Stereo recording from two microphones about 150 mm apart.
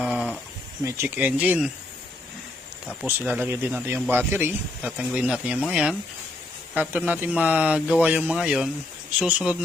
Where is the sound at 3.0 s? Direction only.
10° right (ahead or behind).